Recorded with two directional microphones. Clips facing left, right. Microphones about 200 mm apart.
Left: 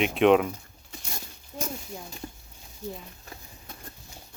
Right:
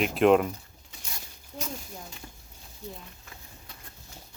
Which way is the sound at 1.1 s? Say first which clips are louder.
Left 2 dB; 45° left (ahead or behind).